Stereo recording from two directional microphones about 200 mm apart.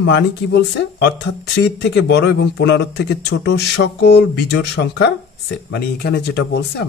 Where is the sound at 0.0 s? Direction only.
60° left (ahead or behind).